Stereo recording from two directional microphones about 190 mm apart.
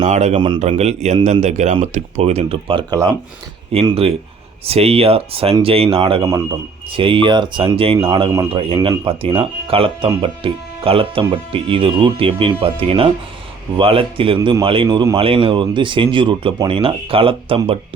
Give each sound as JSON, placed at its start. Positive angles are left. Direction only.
{"t": 0.0, "sound": "speech", "side_deg": -40}
{"t": 0.3, "sound": "speech", "side_deg": -25}